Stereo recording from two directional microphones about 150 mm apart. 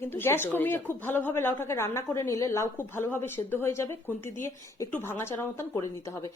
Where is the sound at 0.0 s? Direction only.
15° left (ahead or behind).